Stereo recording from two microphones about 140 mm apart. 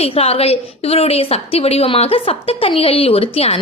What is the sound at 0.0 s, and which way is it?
A woman's voice, 45° left (ahead or behind).